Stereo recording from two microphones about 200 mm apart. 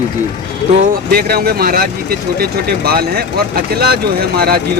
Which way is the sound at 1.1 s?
50° right (ahead or behind).